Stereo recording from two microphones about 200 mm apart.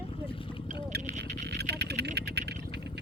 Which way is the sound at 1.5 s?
55° right (ahead or behind).